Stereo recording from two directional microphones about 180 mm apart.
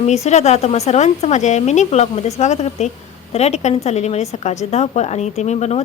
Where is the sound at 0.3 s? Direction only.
40° left (ahead or behind).